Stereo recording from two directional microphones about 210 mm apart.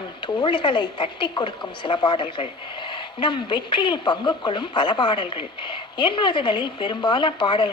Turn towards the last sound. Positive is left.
turn(degrees=25)  # may be behind; listen again after turning